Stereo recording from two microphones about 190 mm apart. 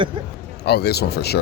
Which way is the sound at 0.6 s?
60° left (ahead or behind).